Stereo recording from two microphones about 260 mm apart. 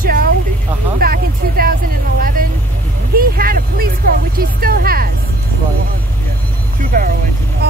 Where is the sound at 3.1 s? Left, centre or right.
Right.